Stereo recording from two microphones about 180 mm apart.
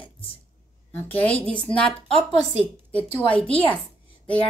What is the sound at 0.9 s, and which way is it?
Speech, 10° left (ahead or behind).